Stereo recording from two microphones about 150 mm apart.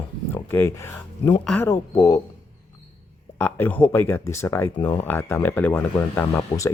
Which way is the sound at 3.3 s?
10° left (ahead or behind).